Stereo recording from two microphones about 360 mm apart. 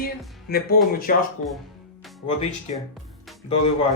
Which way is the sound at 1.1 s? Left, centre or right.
Left.